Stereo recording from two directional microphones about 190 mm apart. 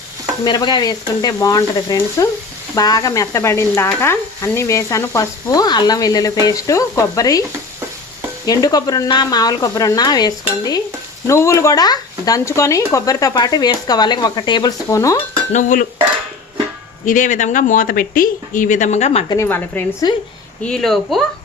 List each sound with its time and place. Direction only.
0.4 s speech: 25° left (ahead or behind)
2.7 s sizzle: 20° left (ahead or behind)
8.4 s speech: 20° left (ahead or behind)
15.5 s speech: 45° left (ahead or behind)
17.1 s speech: 40° left (ahead or behind)
19.3 s sizzle: 15° left (ahead or behind)
20.7 s speech: centre (ahead or behind)